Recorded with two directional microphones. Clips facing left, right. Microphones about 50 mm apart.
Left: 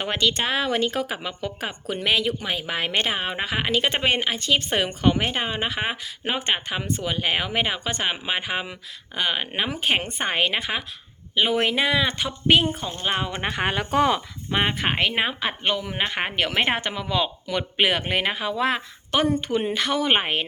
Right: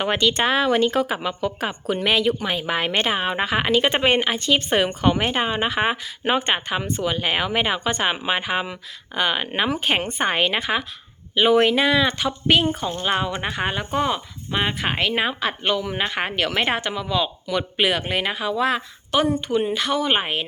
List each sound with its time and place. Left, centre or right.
0.0 s speech: centre
13.4 s speech: left
13.9 s speech: left
14.5 s a woman's voice: left